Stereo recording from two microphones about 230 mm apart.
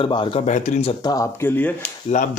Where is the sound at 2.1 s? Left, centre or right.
Left.